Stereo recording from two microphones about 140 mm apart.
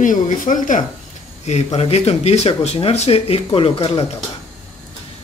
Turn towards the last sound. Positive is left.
turn(degrees=45)  # may be behind; listen again after turning